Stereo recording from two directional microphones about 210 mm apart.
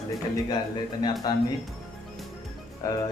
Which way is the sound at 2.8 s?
15° left (ahead or behind).